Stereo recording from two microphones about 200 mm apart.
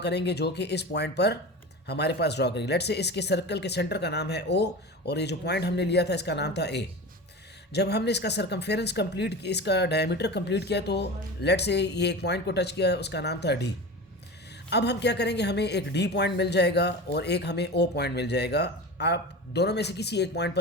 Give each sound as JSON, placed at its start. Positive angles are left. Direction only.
{"t": 0.0, "sound": "speech", "side_deg": 55}
{"t": 14.7, "sound": "speech", "side_deg": 55}